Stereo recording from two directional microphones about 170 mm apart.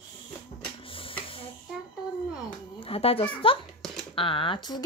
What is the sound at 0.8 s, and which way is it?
Printer, 30° left (ahead or behind).